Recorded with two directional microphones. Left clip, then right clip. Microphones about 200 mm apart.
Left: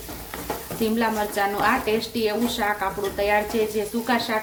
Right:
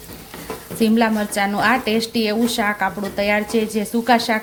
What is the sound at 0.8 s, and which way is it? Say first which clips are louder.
Speech: right 5 dB; 45° right (ahead or behind).